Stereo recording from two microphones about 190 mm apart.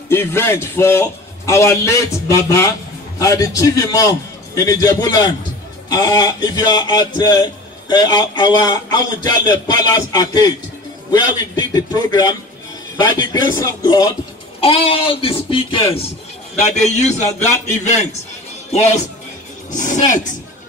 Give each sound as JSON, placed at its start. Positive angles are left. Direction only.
{"t": 0.1, "sound": "a man's voice", "side_deg": 15}
{"t": 14.6, "sound": "a man's voice", "side_deg": 30}
{"t": 19.7, "sound": "speech", "side_deg": 40}